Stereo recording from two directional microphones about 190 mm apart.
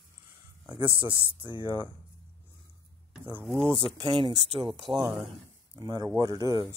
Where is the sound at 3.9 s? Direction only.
25° right (ahead or behind).